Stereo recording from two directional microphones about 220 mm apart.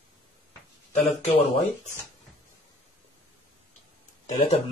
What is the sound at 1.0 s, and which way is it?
Speech, 25° left (ahead or behind).